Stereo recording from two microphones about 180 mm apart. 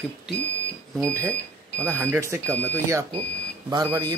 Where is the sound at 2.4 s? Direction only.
10° left (ahead or behind).